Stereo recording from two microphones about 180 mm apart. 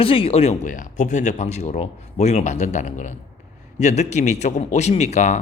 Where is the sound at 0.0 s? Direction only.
30° left (ahead or behind).